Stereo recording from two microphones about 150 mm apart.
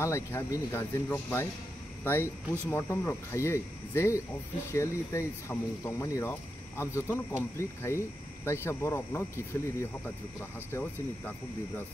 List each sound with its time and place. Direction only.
0.0 s speech: 20° left (ahead or behind)